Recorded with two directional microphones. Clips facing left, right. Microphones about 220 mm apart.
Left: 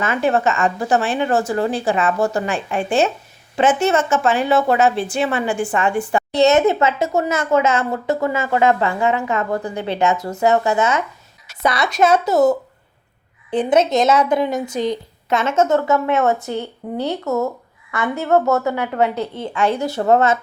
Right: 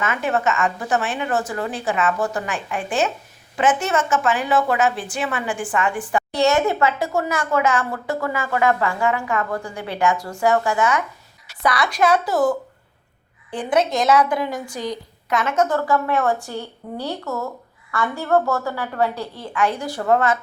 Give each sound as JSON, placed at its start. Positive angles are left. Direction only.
{"t": 0.0, "sound": "a woman's voice", "side_deg": 30}